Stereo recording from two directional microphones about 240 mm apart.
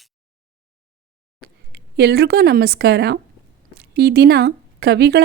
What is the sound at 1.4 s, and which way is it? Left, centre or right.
A woman's voice, right.